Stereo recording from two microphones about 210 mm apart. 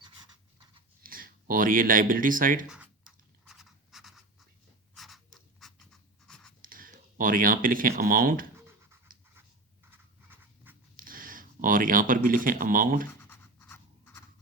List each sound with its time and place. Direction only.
1.0 s speech: 45° right (ahead or behind)
2.6 s scratch: 5° right (ahead or behind)
4.9 s a sound: centre (ahead or behind)
6.6 s speech: 40° right (ahead or behind)
8.5 s scratch: 10° right (ahead or behind)
9.9 s writing: 10° right (ahead or behind)
10.9 s speech: 40° right (ahead or behind)
13.1 s a sound: 10° left (ahead or behind)